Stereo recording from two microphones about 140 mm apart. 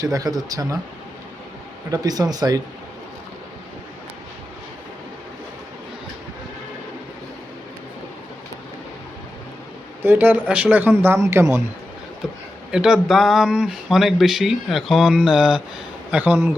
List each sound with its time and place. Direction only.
0.0 s speech: 25° right (ahead or behind)
1.9 s speech: 25° right (ahead or behind)
10.0 s a man's voice: 15° right (ahead or behind)
12.7 s a man's voice: 5° right (ahead or behind)